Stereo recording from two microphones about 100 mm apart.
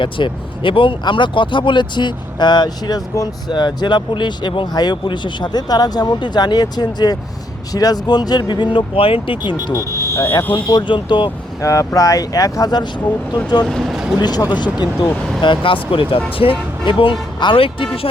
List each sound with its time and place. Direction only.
0.0 s speech: 55° left (ahead or behind)
9.7 s speech: 30° left (ahead or behind)
10.7 s speech: 50° left (ahead or behind)
11.6 s speech: 35° left (ahead or behind)
13.7 s speech: centre (ahead or behind)
14.2 s speech: 45° left (ahead or behind)